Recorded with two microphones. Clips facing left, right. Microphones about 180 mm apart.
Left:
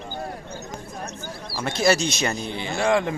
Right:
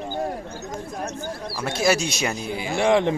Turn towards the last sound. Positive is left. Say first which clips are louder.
# right 3 dB
turn(degrees=-20)  # may be behind; listen again after turning